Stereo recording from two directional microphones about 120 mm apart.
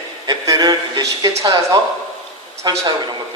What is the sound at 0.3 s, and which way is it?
A man's voice, 30° right (ahead or behind).